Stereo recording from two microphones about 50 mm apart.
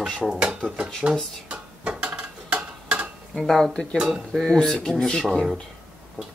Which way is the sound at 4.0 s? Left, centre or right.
Centre.